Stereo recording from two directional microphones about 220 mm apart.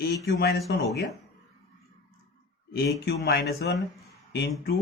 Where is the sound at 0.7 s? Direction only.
45° left (ahead or behind).